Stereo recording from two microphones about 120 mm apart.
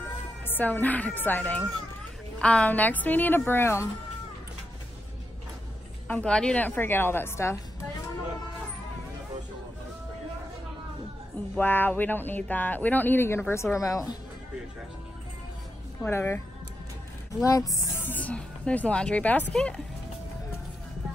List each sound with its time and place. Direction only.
0.5 s speech: 15° left (ahead or behind)
6.0 s speech: 10° left (ahead or behind)
11.5 s speech: 15° left (ahead or behind)
16.0 s a woman's voice: 20° left (ahead or behind)
17.9 s speech: 15° left (ahead or behind)